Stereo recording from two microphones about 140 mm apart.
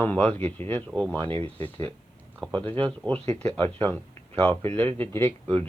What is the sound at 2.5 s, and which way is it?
Speech, 10° left (ahead or behind).